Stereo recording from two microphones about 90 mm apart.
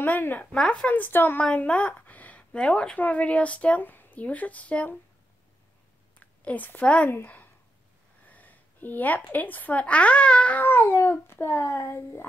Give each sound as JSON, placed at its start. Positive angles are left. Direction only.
{"t": 0.0, "sound": "speech", "side_deg": 20}
{"t": 0.6, "sound": "speech", "side_deg": 5}
{"t": 0.8, "sound": "speech", "side_deg": 20}
{"t": 1.4, "sound": "speech", "side_deg": 10}
{"t": 6.1, "sound": "a woman's voice", "side_deg": 20}
{"t": 8.3, "sound": "a woman's voice", "side_deg": 20}
{"t": 10.6, "sound": "speech", "side_deg": 25}